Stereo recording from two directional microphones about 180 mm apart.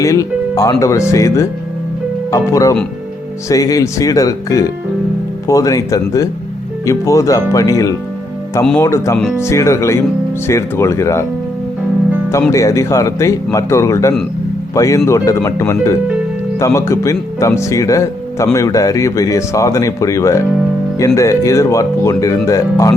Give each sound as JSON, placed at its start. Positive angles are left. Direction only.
{"t": 0.0, "sound": "speech", "side_deg": 20}
{"t": 12.3, "sound": "speech", "side_deg": 15}